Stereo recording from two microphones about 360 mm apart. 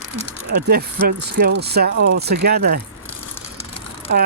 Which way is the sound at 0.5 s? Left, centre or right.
Right.